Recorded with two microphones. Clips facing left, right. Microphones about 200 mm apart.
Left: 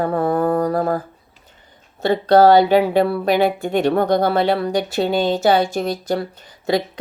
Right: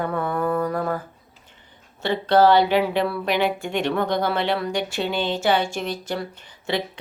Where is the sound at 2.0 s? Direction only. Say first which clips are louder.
Left 5 dB; 40° left (ahead or behind).